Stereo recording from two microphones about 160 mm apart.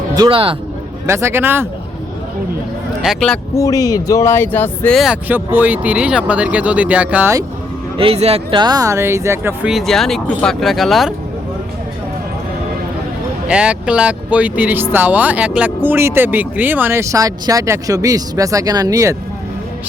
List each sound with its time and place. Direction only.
0.1 s speech: 30° right (ahead or behind)
1.0 s speech: 15° right (ahead or behind)
3.0 s speech: centre (ahead or behind)
3.5 s speech: 20° left (ahead or behind)
4.9 s speech: 5° right (ahead or behind)
7.9 s speech: 35° right (ahead or behind); by 11.1 s centre (ahead or behind)
13.5 s speech: 5° right (ahead or behind)